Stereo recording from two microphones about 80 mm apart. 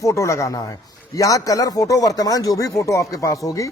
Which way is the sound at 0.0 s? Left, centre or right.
Left.